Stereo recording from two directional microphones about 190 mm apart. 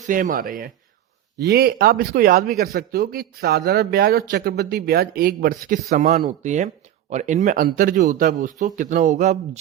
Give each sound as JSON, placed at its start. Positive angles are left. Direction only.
{"t": 0.0, "sound": "speech", "side_deg": -45}